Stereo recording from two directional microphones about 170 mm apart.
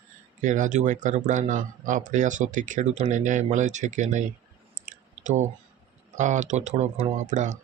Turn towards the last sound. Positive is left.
turn(degrees=-45)  # may be behind; listen again after turning